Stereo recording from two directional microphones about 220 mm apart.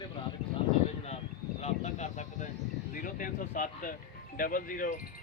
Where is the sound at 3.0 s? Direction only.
35° left (ahead or behind).